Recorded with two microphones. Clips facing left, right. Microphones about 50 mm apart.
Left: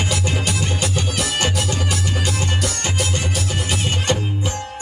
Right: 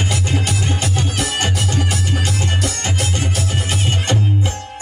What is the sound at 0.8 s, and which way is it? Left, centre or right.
Music, centre.